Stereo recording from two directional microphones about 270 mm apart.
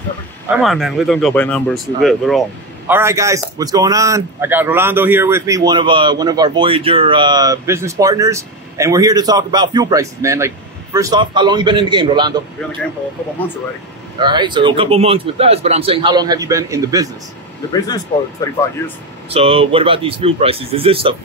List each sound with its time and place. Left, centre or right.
0.6 s a man's voice: centre
14.2 s a man's voice: centre
17.8 s speech: centre
19.3 s speech: right